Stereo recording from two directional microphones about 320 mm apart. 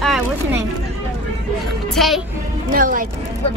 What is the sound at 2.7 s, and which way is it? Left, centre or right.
Speech, right.